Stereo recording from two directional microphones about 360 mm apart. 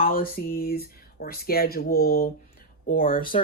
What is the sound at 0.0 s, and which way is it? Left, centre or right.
Speech, left.